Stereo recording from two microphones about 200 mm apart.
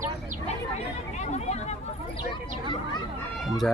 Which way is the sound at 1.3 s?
35° left (ahead or behind).